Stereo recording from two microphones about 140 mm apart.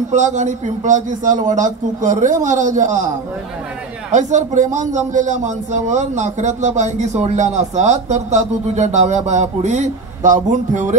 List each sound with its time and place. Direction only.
0.1 s a man's voice: 60° right (ahead or behind)
4.1 s a man's voice: 60° right (ahead or behind)